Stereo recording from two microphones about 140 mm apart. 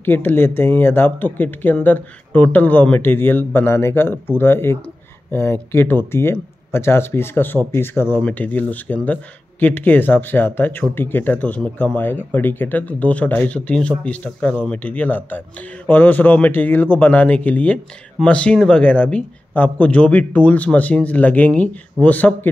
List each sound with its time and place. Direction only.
0.0 s speech: 15° left (ahead or behind)